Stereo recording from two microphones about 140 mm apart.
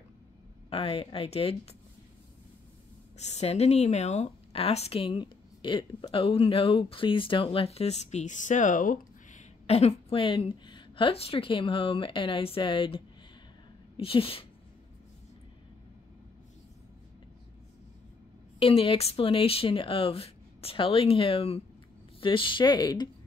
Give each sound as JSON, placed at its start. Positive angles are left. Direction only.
{"t": 0.7, "sound": "speech", "side_deg": 40}
{"t": 3.2, "sound": "speech", "side_deg": 50}
{"t": 18.6, "sound": "speech", "side_deg": 45}